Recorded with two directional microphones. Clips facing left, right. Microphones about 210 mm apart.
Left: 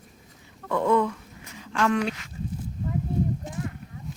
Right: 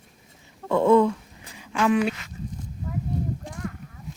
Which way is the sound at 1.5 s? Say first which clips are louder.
Right 2 dB; 10° right (ahead or behind).